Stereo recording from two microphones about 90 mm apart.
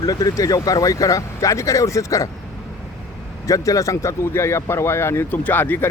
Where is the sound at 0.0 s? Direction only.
45° left (ahead or behind).